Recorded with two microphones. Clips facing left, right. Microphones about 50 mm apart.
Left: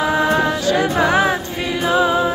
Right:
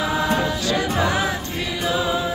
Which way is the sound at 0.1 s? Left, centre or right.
Left.